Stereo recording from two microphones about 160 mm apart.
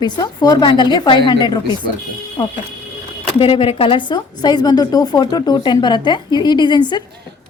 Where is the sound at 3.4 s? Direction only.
35° left (ahead or behind).